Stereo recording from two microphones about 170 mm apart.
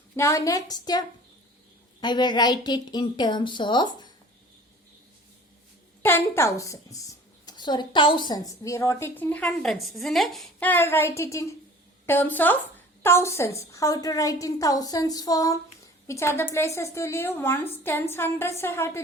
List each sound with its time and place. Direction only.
0.2 s a woman's voice: 20° left (ahead or behind)
6.0 s a woman's voice: 10° left (ahead or behind)